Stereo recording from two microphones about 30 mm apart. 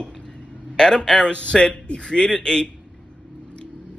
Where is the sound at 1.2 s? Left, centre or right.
Left.